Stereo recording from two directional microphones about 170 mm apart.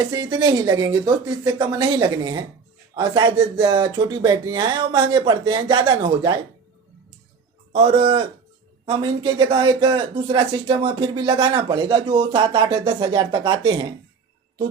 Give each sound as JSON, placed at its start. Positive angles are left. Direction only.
{"t": 0.0, "sound": "speech", "side_deg": -25}
{"t": 7.7, "sound": "a man's voice", "side_deg": -35}